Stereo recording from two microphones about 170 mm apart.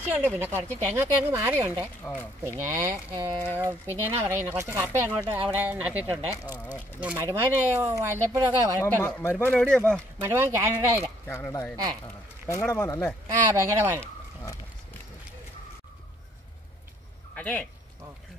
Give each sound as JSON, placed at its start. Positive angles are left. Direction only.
{"t": 0.1, "sound": "speech", "side_deg": -10}
{"t": 8.8, "sound": "speech", "side_deg": 15}
{"t": 10.2, "sound": "speech", "side_deg": -15}
{"t": 11.2, "sound": "speech", "side_deg": 15}
{"t": 11.7, "sound": "speech", "side_deg": -25}
{"t": 12.4, "sound": "speech", "side_deg": 15}
{"t": 13.3, "sound": "speech", "side_deg": -15}
{"t": 17.4, "sound": "speech", "side_deg": 10}